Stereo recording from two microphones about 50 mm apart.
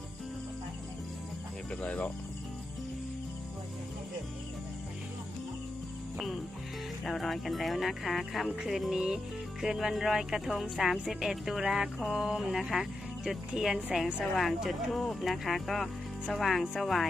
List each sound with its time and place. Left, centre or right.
1.8 s speech: left
7.0 s speech: centre
12.1 s music: centre
13.5 s speech: centre